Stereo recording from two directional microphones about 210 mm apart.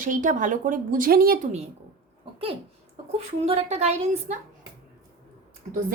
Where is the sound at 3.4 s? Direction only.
30° right (ahead or behind).